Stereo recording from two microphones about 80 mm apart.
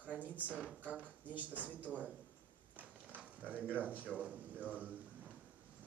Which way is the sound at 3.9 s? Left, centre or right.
Centre.